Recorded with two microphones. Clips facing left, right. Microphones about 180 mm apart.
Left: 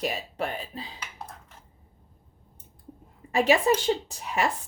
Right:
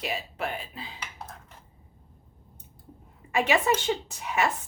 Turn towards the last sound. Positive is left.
turn(degrees=35)  # may be behind; listen again after turning